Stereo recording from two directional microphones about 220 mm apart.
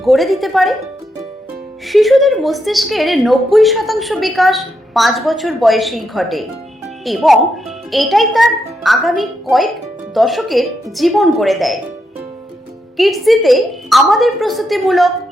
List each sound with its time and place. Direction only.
0.0 s a woman's voice: centre (ahead or behind)
1.9 s a woman's voice: centre (ahead or behind)
6.8 s music: centre (ahead or behind)
7.9 s a woman's voice: centre (ahead or behind)
13.0 s a woman's voice: centre (ahead or behind)